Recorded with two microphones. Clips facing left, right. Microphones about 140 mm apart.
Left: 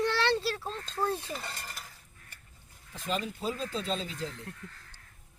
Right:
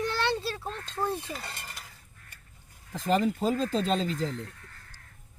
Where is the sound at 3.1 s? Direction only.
70° right (ahead or behind).